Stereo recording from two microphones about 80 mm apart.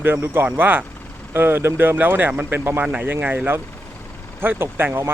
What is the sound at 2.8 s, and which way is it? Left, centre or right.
Speech, centre.